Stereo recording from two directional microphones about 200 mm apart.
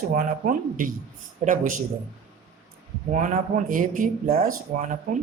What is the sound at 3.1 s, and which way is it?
Speech, 40° right (ahead or behind).